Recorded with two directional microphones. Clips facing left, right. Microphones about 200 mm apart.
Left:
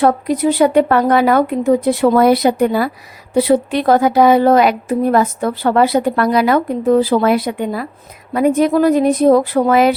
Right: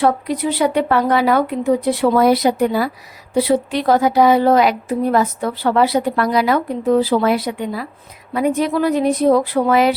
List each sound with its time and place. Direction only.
0.0 s a woman's voice: 45° left (ahead or behind)